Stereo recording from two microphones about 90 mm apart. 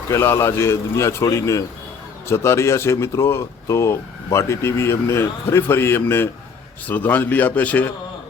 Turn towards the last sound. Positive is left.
turn(degrees=15)  # may be behind; listen again after turning